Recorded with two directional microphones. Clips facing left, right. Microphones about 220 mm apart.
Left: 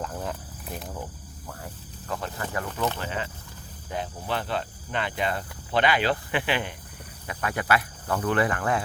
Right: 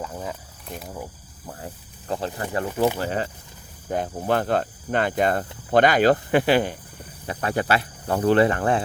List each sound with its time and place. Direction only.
0.0 s cricket: 5° right (ahead or behind)
1.5 s snake: 30° right (ahead or behind)
3.0 s speech: 40° right (ahead or behind)